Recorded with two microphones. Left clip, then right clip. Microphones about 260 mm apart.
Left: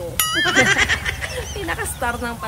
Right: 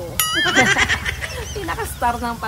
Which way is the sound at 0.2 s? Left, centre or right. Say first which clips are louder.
Right 1 dB; centre.